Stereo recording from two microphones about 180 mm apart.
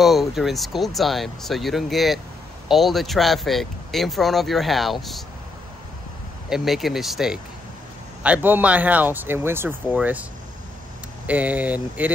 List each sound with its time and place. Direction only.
0.0 s speech: centre (ahead or behind)
6.5 s speech: centre (ahead or behind)
11.2 s speech: 10° right (ahead or behind)